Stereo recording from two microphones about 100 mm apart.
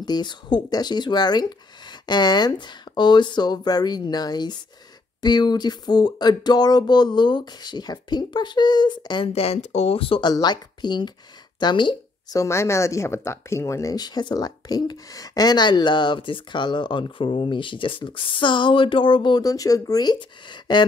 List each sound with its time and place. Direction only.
0.0 s speech: 45° left (ahead or behind)
9.3 s speech: 85° left; by 10.2 s 65° left (ahead or behind)
10.2 s speech: 45° left (ahead or behind)
12.4 s speech: 25° left (ahead or behind)
13.9 s speech: 45° left (ahead or behind)
19.4 s speech: 35° left (ahead or behind)